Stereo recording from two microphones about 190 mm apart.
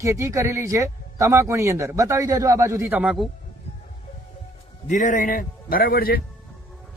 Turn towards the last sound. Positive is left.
turn(degrees=50)  # may be behind; listen again after turning